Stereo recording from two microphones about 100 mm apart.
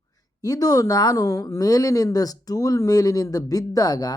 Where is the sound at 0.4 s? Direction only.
40° left (ahead or behind).